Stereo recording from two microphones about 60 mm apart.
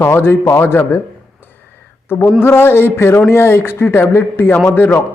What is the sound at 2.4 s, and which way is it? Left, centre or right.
A man's voice, left.